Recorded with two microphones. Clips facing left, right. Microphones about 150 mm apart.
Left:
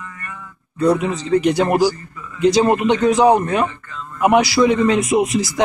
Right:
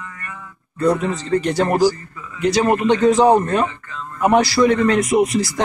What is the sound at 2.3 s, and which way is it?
Speech, 25° left (ahead or behind).